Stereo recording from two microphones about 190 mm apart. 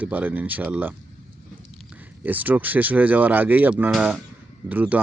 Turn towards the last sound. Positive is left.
turn(degrees=-10)  # may be behind; listen again after turning